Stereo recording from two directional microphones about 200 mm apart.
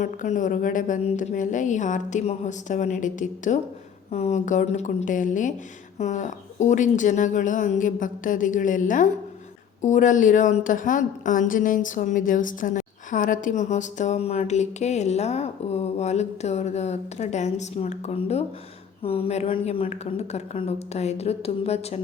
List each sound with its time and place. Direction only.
0.0 s a woman's voice: 40° left (ahead or behind)